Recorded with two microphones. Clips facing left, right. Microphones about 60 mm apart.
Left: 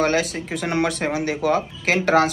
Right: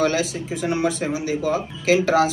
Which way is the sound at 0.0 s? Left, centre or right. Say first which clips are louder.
Left 1 dB; left.